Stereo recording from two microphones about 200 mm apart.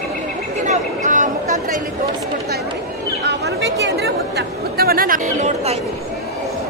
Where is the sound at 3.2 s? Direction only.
60° right (ahead or behind).